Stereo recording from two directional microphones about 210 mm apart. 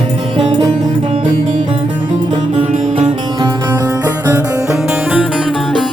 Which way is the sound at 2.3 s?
25° right (ahead or behind).